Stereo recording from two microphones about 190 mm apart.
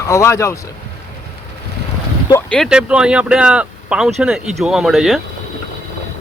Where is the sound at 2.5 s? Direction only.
Centre (ahead or behind).